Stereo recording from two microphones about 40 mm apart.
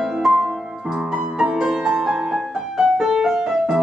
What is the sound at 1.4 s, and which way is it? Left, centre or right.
Music, centre.